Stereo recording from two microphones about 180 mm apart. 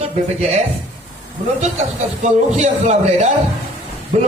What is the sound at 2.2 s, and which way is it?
A man's voice, 40° right (ahead or behind).